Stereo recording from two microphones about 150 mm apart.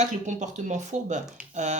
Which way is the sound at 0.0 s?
55° right (ahead or behind).